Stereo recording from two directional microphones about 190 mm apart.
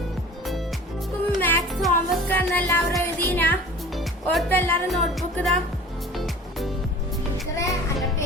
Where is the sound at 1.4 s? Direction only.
5° left (ahead or behind).